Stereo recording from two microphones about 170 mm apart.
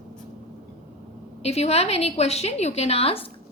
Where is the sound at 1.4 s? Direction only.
40° left (ahead or behind).